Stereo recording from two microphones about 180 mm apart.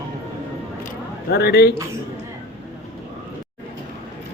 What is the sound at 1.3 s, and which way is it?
Speech, 60° left (ahead or behind).